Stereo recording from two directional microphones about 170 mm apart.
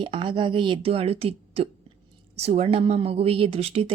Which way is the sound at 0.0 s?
30° right (ahead or behind).